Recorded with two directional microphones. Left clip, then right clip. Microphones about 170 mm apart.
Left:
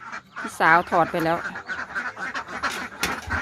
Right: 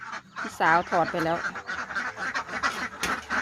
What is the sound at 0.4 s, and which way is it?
Speech, 15° left (ahead or behind).